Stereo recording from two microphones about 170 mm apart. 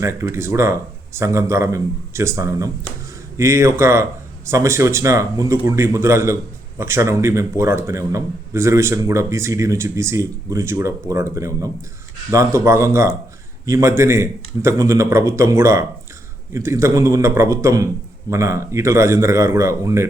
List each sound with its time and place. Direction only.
0.0 s a man's voice: 15° right (ahead or behind)